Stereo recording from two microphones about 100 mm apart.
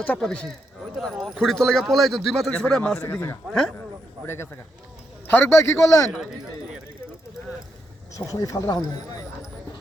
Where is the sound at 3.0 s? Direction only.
25° left (ahead or behind).